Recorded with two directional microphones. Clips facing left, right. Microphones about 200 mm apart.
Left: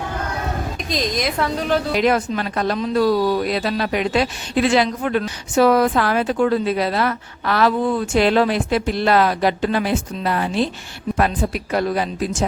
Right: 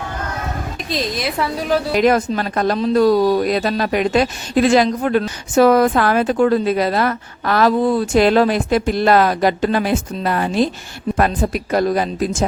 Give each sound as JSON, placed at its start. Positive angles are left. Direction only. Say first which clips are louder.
{"t": 0.9, "sound": "a woman's voice", "louder": "even", "side_deg": -5}
{"t": 2.0, "sound": "speech", "louder": "right 3 dB", "side_deg": -45}